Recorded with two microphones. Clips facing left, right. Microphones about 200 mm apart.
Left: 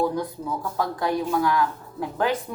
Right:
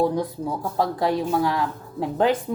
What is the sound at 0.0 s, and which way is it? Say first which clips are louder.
Speech: right 3 dB; 25° right (ahead or behind).